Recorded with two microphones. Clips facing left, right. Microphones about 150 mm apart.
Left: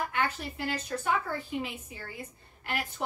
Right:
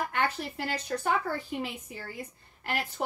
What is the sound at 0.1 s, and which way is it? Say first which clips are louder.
Speech: right 1 dB; 40° right (ahead or behind).